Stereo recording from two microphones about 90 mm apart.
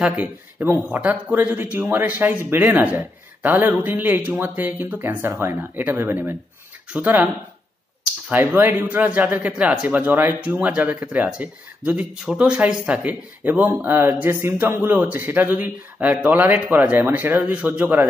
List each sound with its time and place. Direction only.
0.0 s speech: 20° right (ahead or behind)
8.3 s speech: 20° right (ahead or behind)